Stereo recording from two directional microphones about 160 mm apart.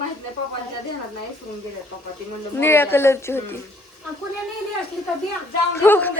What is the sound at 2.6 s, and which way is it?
Speech, 15° left (ahead or behind).